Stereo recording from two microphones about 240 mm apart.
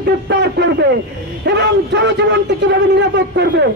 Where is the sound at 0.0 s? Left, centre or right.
Right.